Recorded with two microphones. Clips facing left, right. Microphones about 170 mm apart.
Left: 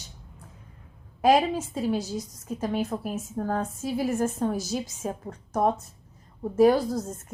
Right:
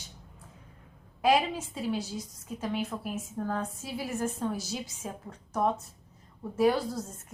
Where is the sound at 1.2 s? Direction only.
45° left (ahead or behind).